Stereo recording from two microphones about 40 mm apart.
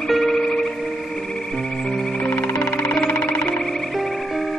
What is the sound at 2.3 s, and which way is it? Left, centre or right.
Music, left.